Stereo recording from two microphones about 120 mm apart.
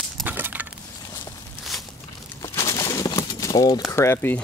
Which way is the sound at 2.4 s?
25° left (ahead or behind).